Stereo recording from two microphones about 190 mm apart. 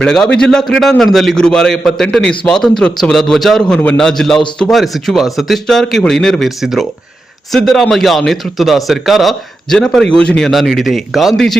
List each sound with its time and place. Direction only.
0.0 s a man's voice: 5° left (ahead or behind)